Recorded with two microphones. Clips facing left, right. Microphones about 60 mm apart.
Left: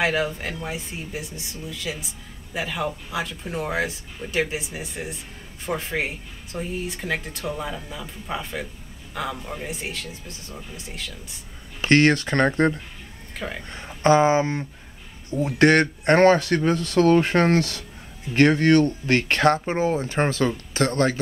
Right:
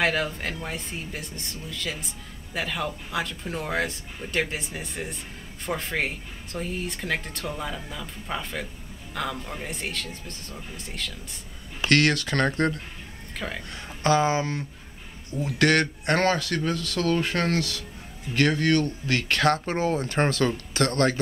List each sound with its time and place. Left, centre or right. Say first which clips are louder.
0.0 s speech: left 2 dB; centre
11.8 s speech: left 4 dB; left
13.4 s speech: left 1 dB; centre
13.7 s speech: left 5 dB; left